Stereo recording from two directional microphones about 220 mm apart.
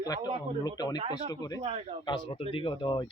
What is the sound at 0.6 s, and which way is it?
Speech, 15° left (ahead or behind).